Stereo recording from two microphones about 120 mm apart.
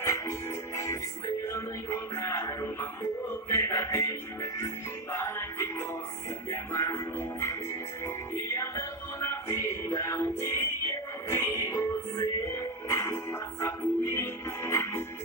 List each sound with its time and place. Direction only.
0.0 s music: 25° left (ahead or behind)
1.5 s music: 20° left (ahead or behind)
5.1 s music: 20° left (ahead or behind)